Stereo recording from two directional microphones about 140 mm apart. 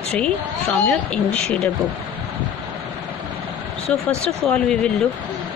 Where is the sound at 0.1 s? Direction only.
10° left (ahead or behind).